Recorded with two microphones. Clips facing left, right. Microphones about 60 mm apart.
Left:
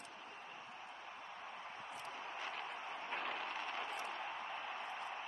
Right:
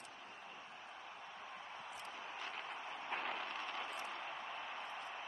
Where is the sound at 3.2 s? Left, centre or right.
Centre.